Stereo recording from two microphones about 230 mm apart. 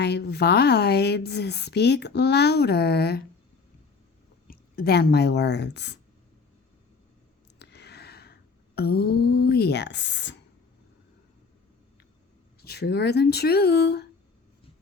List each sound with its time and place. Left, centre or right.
0.0 s a woman's voice: left
4.4 s a woman's voice: left
7.6 s a sound: left
12.6 s a woman's voice: left